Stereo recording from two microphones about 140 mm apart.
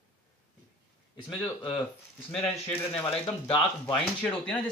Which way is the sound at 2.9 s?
10° left (ahead or behind).